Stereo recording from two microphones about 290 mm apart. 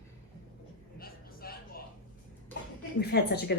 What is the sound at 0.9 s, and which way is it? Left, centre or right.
Music, left.